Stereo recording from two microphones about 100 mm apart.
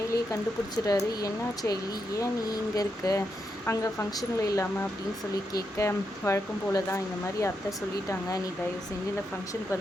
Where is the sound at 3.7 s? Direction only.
25° left (ahead or behind).